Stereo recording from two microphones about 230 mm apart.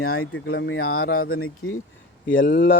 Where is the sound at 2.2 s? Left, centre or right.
Left.